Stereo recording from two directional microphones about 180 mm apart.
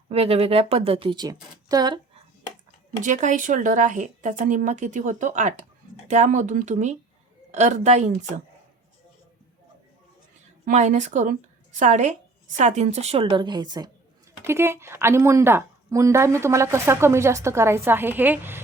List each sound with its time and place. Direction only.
0.1 s speech: 35° right (ahead or behind)
3.0 s a woman's voice: 45° right (ahead or behind)
10.7 s a woman's voice: 40° right (ahead or behind); by 18.6 s 10° right (ahead or behind)